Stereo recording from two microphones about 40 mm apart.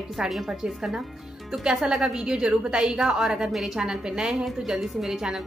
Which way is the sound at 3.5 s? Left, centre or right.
Centre.